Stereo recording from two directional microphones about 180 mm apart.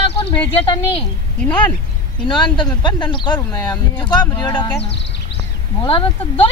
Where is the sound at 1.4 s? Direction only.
5° left (ahead or behind).